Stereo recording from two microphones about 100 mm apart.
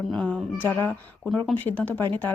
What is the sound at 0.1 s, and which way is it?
A woman's voice, 10° left (ahead or behind).